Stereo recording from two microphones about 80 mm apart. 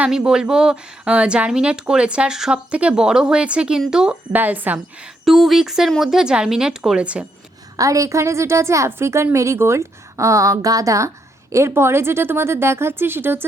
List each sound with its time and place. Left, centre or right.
0.1 s speech: centre
4.4 s a woman's voice: right
5.2 s speech: centre
7.8 s a woman's voice: right